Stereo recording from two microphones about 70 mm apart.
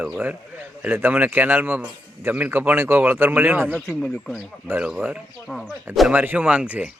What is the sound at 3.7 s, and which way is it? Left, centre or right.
Speech, centre.